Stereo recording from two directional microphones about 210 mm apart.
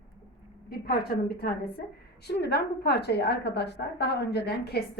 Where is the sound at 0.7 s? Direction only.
45° left (ahead or behind).